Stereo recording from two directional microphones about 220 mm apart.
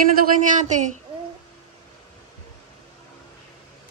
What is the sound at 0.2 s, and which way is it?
Speech, 35° right (ahead or behind).